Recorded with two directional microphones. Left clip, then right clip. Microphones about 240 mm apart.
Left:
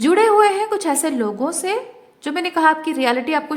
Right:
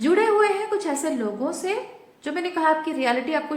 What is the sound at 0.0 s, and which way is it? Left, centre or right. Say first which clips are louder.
A woman's voice: left 6 dB; left.